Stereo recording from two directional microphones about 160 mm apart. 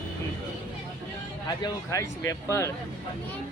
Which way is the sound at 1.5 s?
20° left (ahead or behind).